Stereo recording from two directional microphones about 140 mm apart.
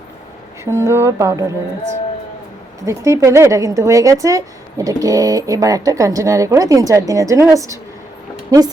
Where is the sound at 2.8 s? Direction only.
20° right (ahead or behind).